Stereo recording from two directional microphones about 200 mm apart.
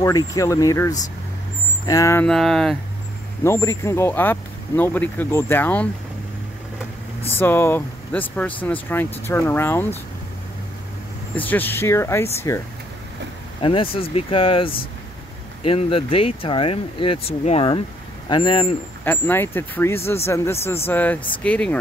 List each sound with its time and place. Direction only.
0.0 s speech: 15° left (ahead or behind)
2.2 s speech: centre (ahead or behind)
3.4 s speech: 15° left (ahead or behind)
7.2 s speech: 10° left (ahead or behind)
11.3 s speech: 10° left (ahead or behind)
13.6 s speech: 25° left (ahead or behind)
19.0 s speech: 10° left (ahead or behind)